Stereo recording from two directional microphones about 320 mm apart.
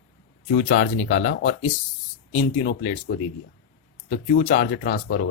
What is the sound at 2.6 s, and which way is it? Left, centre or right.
Speech, left.